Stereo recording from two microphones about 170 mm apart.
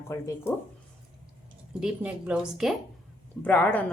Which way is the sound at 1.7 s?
5° right (ahead or behind).